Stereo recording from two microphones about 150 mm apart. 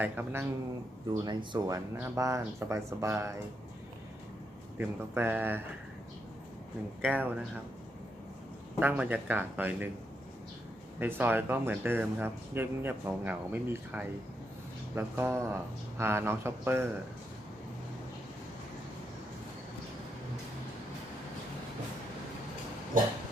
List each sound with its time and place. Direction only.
0.0 s speech: 15° right (ahead or behind)
1.2 s speech: 30° right (ahead or behind)
4.8 s speech: 15° right (ahead or behind)
7.0 s speech: 10° right (ahead or behind)
8.8 s speech: 10° right (ahead or behind)
11.0 s speech: 15° right (ahead or behind)